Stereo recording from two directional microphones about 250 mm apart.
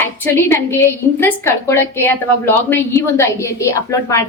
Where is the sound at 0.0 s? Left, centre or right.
Centre.